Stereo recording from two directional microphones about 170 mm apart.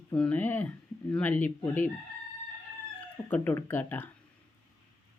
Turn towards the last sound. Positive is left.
turn(degrees=10)  # may be behind; listen again after turning